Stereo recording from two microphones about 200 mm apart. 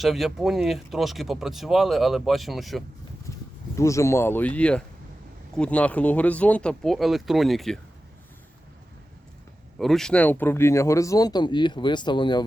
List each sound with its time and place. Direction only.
0.0 s speech: centre (ahead or behind)
3.8 s speech: 15° left (ahead or behind)
9.7 s speech: centre (ahead or behind); by 12.5 s 20° left (ahead or behind)